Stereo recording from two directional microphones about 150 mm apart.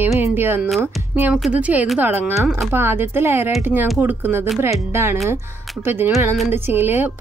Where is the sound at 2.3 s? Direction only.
Centre (ahead or behind).